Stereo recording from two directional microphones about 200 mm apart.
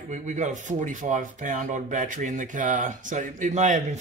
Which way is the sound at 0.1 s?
40° right (ahead or behind).